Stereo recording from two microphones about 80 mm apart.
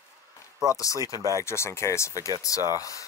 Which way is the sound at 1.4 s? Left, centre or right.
Left.